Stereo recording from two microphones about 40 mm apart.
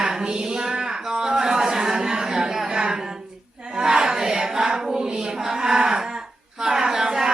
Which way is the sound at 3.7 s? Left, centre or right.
Centre.